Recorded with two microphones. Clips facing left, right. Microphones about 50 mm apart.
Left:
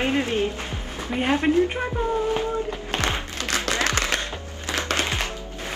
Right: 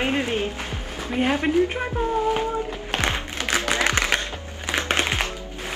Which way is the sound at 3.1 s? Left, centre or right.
Right.